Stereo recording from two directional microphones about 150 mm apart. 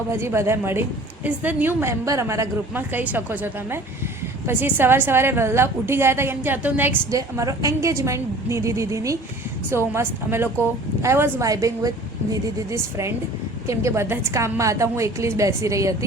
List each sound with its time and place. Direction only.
0.1 s a woman's voice: 15° right (ahead or behind)